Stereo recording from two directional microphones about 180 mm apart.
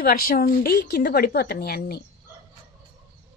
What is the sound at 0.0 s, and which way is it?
A woman's voice, 55° left (ahead or behind).